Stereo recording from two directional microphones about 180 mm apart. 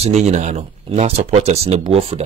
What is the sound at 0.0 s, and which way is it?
Speech, 40° right (ahead or behind).